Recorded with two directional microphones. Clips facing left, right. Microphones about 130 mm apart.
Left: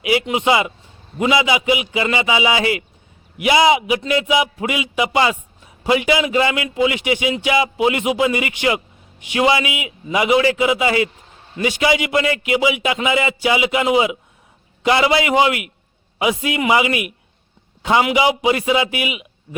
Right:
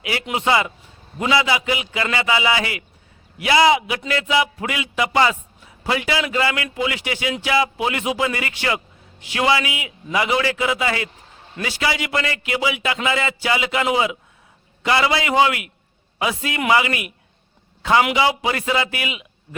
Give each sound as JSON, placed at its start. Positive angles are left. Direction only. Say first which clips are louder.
{"t": 0.0, "sound": "a man's voice", "louder": "left 5 dB", "side_deg": 15}
{"t": 18.1, "sound": "a man's voice", "louder": "left 3 dB", "side_deg": 15}